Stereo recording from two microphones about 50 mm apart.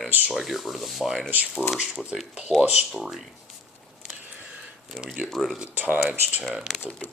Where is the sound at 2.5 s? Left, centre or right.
Right.